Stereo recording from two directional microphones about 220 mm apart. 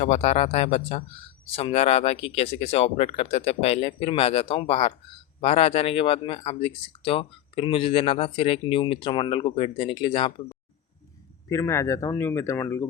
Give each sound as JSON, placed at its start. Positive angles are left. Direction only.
{"t": 0.0, "sound": "speech", "side_deg": 30}
{"t": 11.4, "sound": "speech", "side_deg": 15}